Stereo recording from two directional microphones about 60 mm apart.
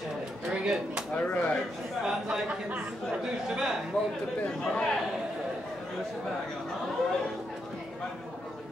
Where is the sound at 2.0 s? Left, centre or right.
Centre.